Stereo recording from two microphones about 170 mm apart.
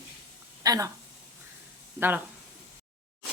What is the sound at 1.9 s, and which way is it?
Speech, 10° right (ahead or behind).